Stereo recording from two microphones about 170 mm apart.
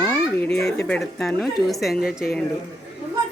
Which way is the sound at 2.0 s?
60° left (ahead or behind).